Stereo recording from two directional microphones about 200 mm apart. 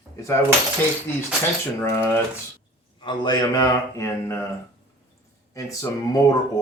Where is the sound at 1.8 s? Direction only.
10° left (ahead or behind).